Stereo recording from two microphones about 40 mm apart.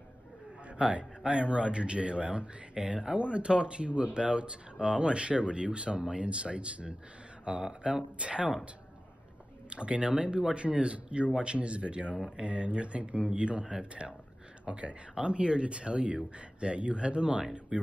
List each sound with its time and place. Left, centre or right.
0.7 s speech: right
9.7 s speech: right